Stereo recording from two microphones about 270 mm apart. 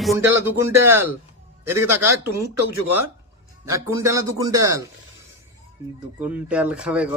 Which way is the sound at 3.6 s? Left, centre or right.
Centre.